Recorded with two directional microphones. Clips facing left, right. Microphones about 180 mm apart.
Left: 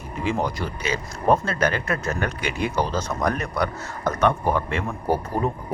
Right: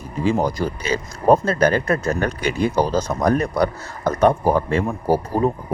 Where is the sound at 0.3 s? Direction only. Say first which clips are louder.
Right 6 dB; 40° right (ahead or behind).